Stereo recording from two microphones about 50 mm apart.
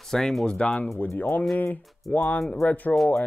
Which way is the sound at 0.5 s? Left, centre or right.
Left.